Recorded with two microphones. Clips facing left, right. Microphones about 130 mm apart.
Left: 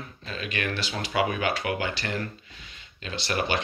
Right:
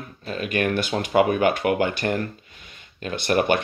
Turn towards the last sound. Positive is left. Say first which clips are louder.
# right 7 dB
turn(degrees=-50)  # may be behind; listen again after turning